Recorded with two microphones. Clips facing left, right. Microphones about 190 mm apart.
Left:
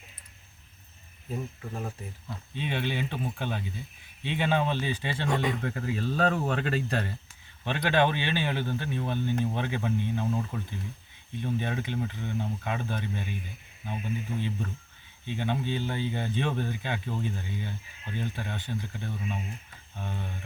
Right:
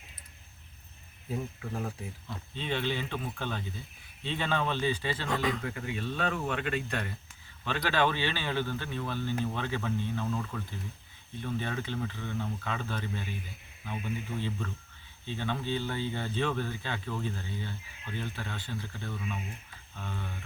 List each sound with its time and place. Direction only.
1.3 s speech: centre (ahead or behind)
2.6 s speech: 15° left (ahead or behind); by 7.1 s 35° left (ahead or behind)
7.6 s speech: 20° left (ahead or behind)